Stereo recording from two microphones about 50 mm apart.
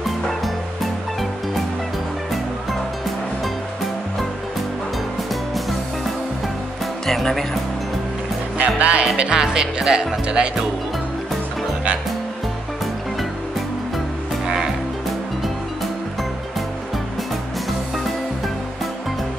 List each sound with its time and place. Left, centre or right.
0.0 s music: centre
7.1 s speech: centre
8.5 s music: right
9.0 s speech: centre
14.4 s music: centre